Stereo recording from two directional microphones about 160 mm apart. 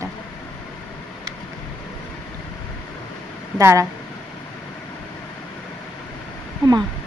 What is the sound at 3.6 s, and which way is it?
Speech, 20° right (ahead or behind).